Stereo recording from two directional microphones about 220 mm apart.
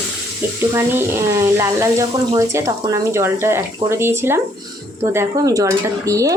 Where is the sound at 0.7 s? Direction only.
10° right (ahead or behind).